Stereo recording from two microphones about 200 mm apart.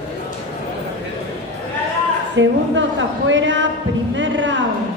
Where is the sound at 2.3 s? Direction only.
65° right (ahead or behind).